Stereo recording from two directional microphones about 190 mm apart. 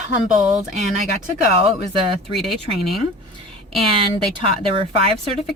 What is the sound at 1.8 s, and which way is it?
Speech, 30° right (ahead or behind).